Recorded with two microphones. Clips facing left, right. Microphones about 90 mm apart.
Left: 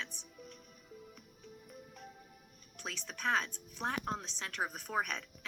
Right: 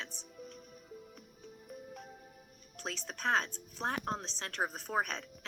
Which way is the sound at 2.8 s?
35° right (ahead or behind).